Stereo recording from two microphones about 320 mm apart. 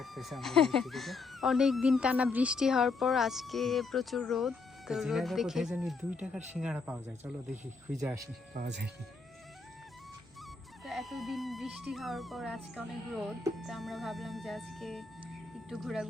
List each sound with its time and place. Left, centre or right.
0.0 s speech: centre
8.5 s speech: right
10.8 s speech: centre